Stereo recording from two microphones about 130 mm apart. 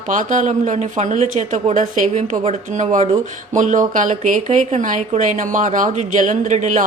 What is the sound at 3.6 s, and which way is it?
Speech, 80° right.